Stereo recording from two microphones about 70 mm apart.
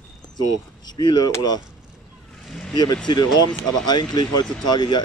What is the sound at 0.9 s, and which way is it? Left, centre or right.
Speech, left.